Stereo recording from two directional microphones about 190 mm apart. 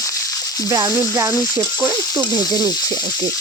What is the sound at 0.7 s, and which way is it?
Speech, 20° right (ahead or behind).